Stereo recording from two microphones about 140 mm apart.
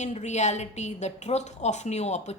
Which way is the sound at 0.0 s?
55° left (ahead or behind).